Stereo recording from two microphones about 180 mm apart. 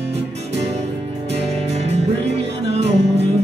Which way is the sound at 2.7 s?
35° right (ahead or behind).